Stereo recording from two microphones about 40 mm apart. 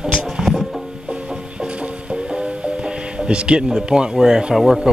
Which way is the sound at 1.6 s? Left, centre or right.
Right.